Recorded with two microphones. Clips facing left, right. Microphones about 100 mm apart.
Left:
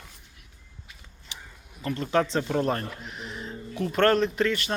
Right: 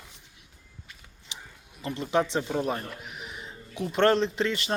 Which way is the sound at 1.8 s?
20° right (ahead or behind).